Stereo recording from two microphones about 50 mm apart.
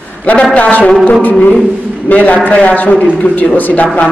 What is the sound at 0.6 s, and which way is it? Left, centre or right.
Speech, left.